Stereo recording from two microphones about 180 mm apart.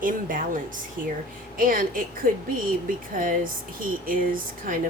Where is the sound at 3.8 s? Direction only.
50° right (ahead or behind).